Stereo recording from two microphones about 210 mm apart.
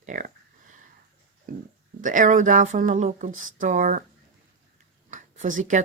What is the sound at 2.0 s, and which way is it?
Speech, 40° right (ahead or behind).